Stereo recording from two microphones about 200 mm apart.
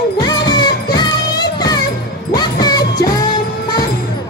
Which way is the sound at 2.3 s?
20° left (ahead or behind).